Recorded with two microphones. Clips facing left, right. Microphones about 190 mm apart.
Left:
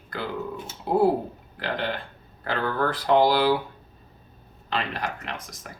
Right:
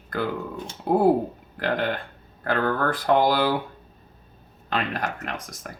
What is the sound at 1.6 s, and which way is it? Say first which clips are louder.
Speech: right 4 dB; 50° right (ahead or behind).